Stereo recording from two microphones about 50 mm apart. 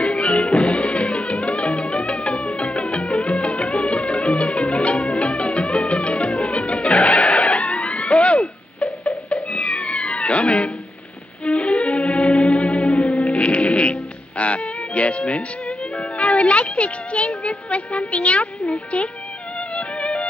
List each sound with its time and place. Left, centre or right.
0.0 s music: left